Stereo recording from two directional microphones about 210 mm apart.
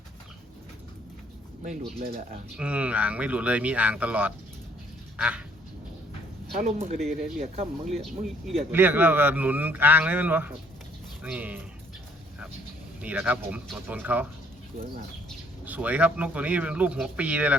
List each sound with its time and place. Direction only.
1.6 s speech: 40° right (ahead or behind)
2.6 s a man's voice: 5° right (ahead or behind)
5.1 s duck: 5° right (ahead or behind)
6.6 s speech: 35° right (ahead or behind)
8.7 s a man's voice: 10° right (ahead or behind)
13.0 s a man's voice: 5° right (ahead or behind)
15.6 s a man's voice: 5° right (ahead or behind)